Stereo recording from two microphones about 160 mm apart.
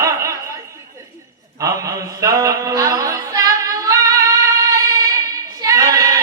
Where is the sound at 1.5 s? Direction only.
20° right (ahead or behind).